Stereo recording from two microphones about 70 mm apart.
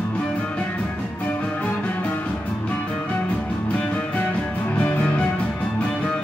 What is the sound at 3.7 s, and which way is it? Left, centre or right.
Music, centre.